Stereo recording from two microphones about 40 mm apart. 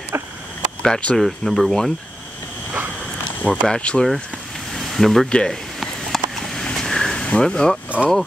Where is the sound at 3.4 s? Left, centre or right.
Left.